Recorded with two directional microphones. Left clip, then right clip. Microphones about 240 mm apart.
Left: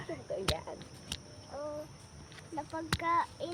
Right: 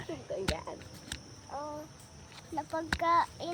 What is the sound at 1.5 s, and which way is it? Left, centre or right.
Music, right.